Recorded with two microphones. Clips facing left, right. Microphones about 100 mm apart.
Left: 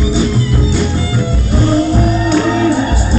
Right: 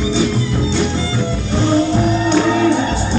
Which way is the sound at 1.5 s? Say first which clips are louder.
Left 2 dB; 5° left (ahead or behind).